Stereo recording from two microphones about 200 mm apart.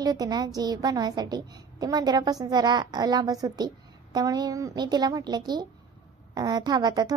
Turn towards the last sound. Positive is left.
turn(degrees=-20)  # may be behind; listen again after turning